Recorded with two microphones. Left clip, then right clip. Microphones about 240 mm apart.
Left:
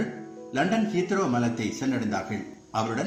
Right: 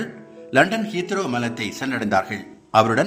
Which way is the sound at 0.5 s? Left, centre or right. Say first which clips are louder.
Right 8 dB; right.